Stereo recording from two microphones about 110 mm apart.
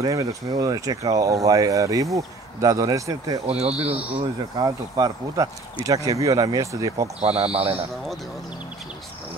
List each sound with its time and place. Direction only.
0.0 s speech: 30° right (ahead or behind)
3.4 s speech: 70° right (ahead or behind)
4.6 s speech: 30° right (ahead or behind)
7.2 s speech: 65° right (ahead or behind)